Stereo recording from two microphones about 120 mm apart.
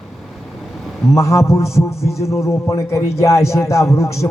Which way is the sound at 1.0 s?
25° left (ahead or behind).